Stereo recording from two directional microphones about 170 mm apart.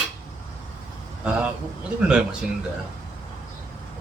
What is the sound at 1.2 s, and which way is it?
A man's voice, 5° right (ahead or behind).